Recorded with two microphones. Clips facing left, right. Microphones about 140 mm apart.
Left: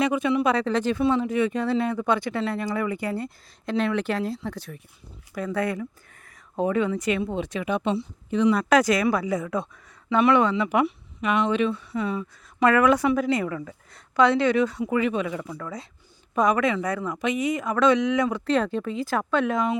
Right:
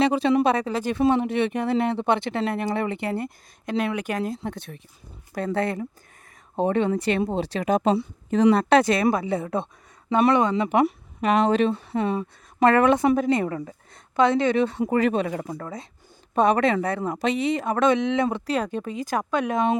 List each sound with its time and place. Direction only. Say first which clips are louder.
0.0 s speech: right 3 dB; 30° right (ahead or behind)
0.6 s speech: left 3 dB; 10° right (ahead or behind)
1.2 s speech: even; 25° right (ahead or behind); by 8.4 s 45° right (ahead or behind)
8.5 s speech: right 2 dB; 30° right (ahead or behind)
11.9 s speech: right 3 dB; 50° right (ahead or behind); by 13.7 s 35° right (ahead or behind)
13.9 s a woman's voice: even; 20° right (ahead or behind)
14.8 s speech: right 2 dB; 40° right (ahead or behind)
16.3 s speech: right 2 dB; 30° right (ahead or behind)
18.4 s speech: left 2 dB; 15° right (ahead or behind)